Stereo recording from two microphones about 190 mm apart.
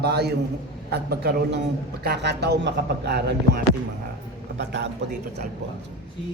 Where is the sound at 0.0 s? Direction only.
60° right (ahead or behind).